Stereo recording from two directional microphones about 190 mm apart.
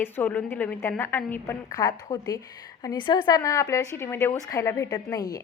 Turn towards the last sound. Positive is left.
turn(degrees=20)  # may be behind; listen again after turning